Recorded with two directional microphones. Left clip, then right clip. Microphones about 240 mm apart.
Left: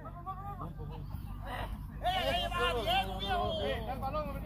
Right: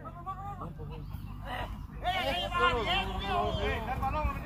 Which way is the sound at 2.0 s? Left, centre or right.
Left.